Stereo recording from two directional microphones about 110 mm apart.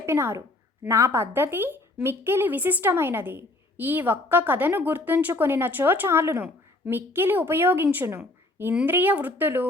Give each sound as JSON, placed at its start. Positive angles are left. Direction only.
{"t": 0.0, "sound": "a woman's voice", "side_deg": -25}